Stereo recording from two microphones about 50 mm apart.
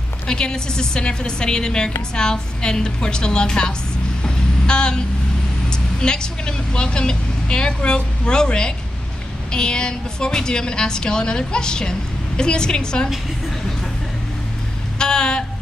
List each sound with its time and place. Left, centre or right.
0.3 s a woman's voice: centre
4.2 s vehicle: centre
5.7 s a woman's voice: centre
15.0 s a sound: centre